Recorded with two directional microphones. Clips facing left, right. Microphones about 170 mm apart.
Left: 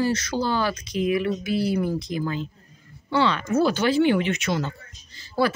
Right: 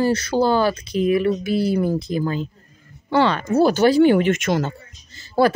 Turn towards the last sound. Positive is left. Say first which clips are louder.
# right 6 dB
turn(degrees=-45)  # may be behind; listen again after turning